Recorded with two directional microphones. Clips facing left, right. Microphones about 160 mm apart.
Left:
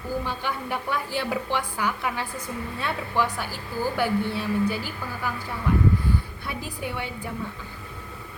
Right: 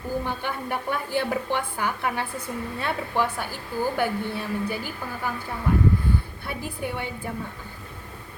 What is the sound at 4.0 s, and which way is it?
Speech, 50° right (ahead or behind).